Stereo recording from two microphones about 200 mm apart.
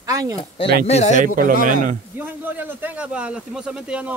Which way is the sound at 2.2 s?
10° right (ahead or behind).